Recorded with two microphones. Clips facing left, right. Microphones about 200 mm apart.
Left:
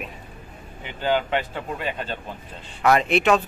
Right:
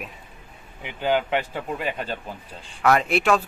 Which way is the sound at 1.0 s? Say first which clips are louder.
Even; 10° right (ahead or behind).